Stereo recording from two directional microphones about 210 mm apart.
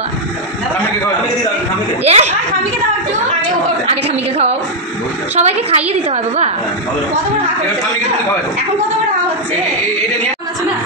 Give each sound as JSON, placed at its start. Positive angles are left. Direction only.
{"t": 2.0, "sound": "chuckle", "side_deg": -30}
{"t": 3.8, "sound": "a sound", "side_deg": -30}
{"t": 5.3, "sound": "a woman's voice", "side_deg": -30}